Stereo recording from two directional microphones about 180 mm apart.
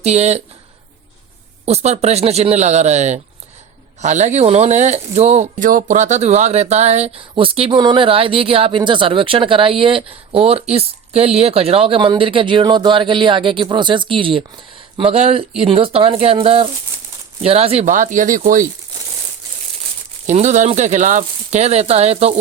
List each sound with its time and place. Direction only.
0.0 s speech: 35° right (ahead or behind)
1.6 s speech: 35° right (ahead or behind)
20.2 s speech: 40° right (ahead or behind)